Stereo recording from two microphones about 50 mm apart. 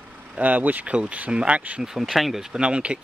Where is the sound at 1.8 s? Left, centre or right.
Centre.